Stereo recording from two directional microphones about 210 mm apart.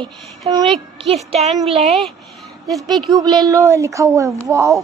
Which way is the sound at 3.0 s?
20° right (ahead or behind).